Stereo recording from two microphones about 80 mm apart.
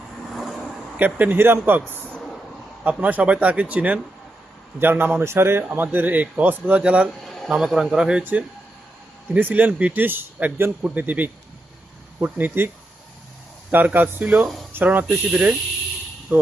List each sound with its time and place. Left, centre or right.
0.9 s a man's voice: right
2.8 s a man's voice: centre
8.2 s a man's voice: right